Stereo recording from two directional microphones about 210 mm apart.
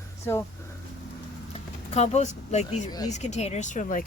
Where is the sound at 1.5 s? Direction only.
30° left (ahead or behind).